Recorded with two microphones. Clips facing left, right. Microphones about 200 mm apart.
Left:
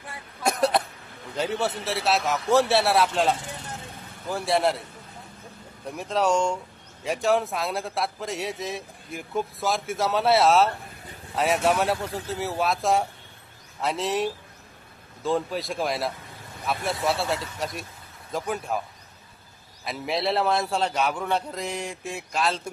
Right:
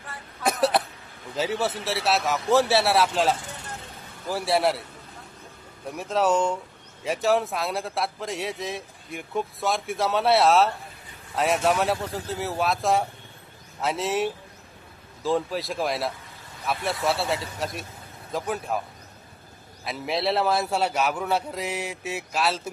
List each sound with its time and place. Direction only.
0.4 s cough: centre (ahead or behind)
1.4 s a man's voice: centre (ahead or behind)
6.0 s a man's voice: centre (ahead or behind)
19.8 s a man's voice: centre (ahead or behind)